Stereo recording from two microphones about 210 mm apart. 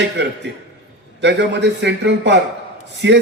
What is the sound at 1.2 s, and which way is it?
A man's voice, 55° right (ahead or behind).